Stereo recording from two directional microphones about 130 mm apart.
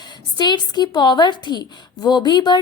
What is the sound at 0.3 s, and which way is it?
A woman's voice, 35° left (ahead or behind).